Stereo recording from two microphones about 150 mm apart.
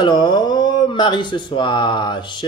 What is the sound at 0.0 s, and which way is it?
Speech, 30° left (ahead or behind).